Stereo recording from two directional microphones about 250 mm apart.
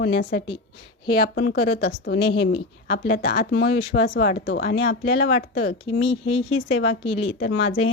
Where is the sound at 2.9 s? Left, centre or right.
Left.